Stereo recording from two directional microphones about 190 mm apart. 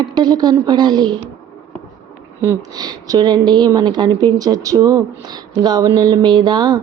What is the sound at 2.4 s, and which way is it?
Speech, 15° right (ahead or behind).